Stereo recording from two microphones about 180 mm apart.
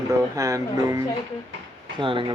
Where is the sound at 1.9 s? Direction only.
30° right (ahead or behind).